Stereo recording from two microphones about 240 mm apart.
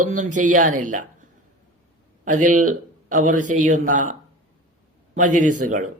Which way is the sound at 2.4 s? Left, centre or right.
Right.